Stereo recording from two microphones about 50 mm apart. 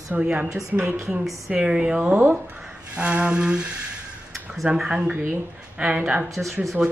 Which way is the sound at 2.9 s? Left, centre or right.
Right.